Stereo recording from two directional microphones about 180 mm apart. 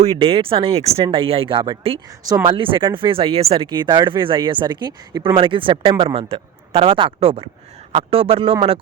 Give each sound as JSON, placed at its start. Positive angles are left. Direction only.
{"t": 0.0, "sound": "speech", "side_deg": -30}